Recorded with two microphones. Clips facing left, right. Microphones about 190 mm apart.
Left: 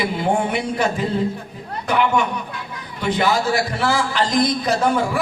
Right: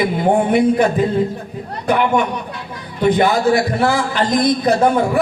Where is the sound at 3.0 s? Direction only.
55° right (ahead or behind).